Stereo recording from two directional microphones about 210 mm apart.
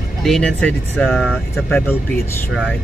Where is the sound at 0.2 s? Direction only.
5° left (ahead or behind).